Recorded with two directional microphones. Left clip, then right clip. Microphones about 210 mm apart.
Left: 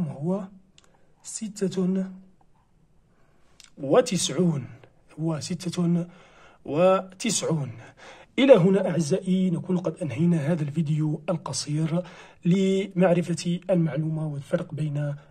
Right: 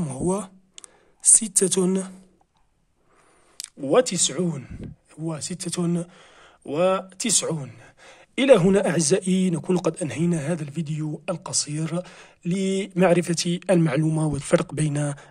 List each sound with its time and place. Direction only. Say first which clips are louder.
0.0 s a sound: right 4 dB; 40° right (ahead or behind)
3.8 s speech: right 1 dB; 15° right (ahead or behind)
12.9 s speech: right 7 dB; 25° right (ahead or behind)